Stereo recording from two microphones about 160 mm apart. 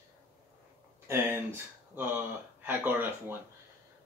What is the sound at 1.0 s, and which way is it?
Speech, 15° right (ahead or behind).